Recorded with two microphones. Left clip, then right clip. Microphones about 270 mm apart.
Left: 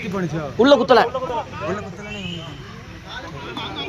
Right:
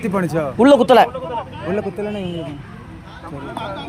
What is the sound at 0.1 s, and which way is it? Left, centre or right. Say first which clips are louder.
Speech: right 7 dB; right.